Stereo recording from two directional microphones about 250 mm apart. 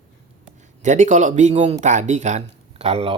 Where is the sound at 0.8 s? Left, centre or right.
Right.